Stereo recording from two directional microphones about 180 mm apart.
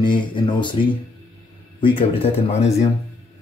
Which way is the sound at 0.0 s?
25° left (ahead or behind).